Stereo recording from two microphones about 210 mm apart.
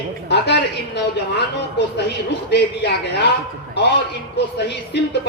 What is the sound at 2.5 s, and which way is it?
Speech, 55° left (ahead or behind).